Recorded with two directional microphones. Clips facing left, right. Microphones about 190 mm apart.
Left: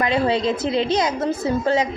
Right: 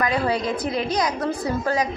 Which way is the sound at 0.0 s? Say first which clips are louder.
Left 3 dB; 25° left (ahead or behind).